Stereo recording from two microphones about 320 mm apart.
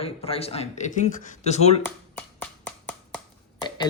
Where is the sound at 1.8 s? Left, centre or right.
Centre.